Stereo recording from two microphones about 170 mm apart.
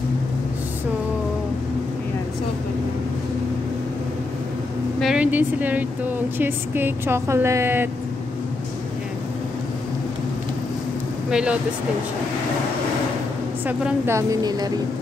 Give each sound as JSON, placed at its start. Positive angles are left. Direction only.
{"t": 5.0, "sound": "a woman's voice", "side_deg": -5}
{"t": 11.2, "sound": "speech", "side_deg": -5}
{"t": 13.7, "sound": "a woman's voice", "side_deg": -10}